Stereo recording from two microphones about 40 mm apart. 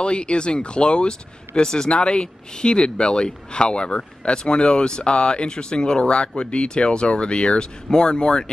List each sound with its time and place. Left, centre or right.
0.0 s speech: left